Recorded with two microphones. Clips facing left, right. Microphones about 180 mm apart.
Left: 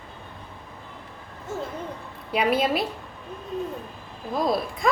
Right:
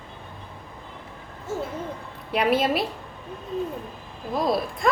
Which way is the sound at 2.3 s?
Centre (ahead or behind).